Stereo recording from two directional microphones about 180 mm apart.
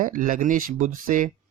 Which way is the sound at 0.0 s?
50° right (ahead or behind).